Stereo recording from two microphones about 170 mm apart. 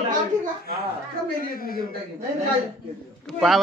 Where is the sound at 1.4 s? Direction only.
60° left (ahead or behind).